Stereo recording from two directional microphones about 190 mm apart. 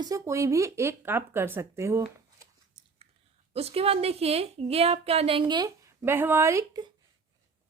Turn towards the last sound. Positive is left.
turn(degrees=-20)  # may be behind; listen again after turning